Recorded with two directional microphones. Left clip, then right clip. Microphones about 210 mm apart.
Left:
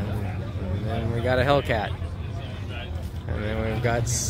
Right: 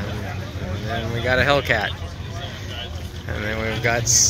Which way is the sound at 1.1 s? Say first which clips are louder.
Right 3 dB; 10° left (ahead or behind).